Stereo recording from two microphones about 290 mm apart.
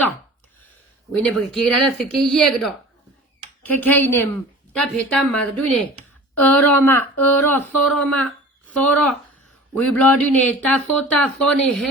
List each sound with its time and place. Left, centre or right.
1.1 s a woman's voice: centre